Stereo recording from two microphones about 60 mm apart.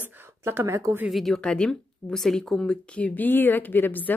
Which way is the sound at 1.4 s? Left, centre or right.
Centre.